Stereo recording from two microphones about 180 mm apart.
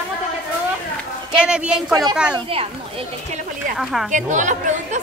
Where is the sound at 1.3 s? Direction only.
5° right (ahead or behind).